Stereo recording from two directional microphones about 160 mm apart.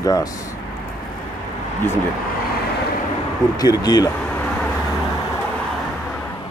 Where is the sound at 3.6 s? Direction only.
25° left (ahead or behind).